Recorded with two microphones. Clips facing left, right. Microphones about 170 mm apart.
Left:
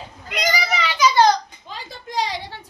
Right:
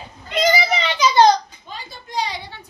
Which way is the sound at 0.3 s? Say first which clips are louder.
Right 5 dB; 25° right (ahead or behind).